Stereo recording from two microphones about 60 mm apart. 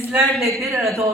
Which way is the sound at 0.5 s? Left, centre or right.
Right.